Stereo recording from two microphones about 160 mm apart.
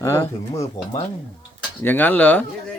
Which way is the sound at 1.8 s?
10° left (ahead or behind).